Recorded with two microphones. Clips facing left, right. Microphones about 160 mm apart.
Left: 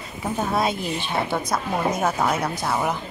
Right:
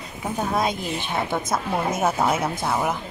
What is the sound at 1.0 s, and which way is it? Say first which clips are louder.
Speech: left 1 dB; 20° right (ahead or behind).